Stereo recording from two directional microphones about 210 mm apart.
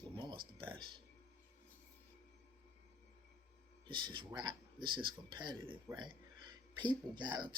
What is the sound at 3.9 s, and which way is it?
Speech, 20° right (ahead or behind).